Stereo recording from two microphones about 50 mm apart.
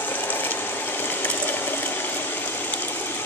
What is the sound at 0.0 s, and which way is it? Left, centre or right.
Ratchet, left.